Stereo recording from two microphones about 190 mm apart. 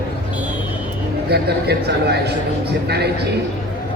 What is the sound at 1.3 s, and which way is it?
A man's voice, 60° right (ahead or behind).